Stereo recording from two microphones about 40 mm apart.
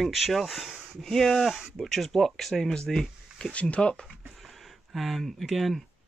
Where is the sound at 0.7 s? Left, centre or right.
Centre.